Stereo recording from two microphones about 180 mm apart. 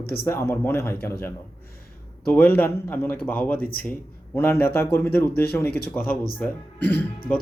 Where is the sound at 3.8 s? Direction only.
10° left (ahead or behind).